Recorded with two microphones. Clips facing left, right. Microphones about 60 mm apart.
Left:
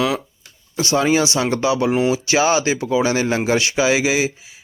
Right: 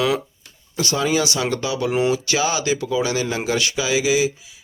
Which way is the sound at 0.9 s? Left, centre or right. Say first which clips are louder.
Left 4 dB; left.